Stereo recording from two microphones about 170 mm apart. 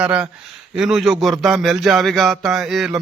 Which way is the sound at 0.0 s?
5° right (ahead or behind).